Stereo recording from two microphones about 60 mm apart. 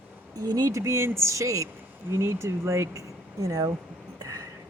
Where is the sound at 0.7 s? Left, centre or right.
Right.